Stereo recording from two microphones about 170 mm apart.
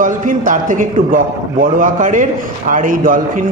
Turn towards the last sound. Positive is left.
turn(degrees=-55)  # may be behind; listen again after turning